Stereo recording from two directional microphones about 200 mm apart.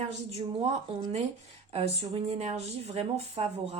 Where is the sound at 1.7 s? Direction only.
30° right (ahead or behind).